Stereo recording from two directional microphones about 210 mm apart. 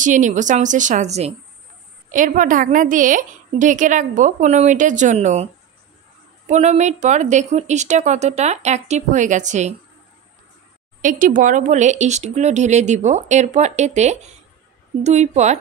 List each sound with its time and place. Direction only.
0.0 s a woman's voice: 35° right (ahead or behind)
6.5 s a woman's voice: 30° right (ahead or behind)
11.0 s a woman's voice: 40° right (ahead or behind)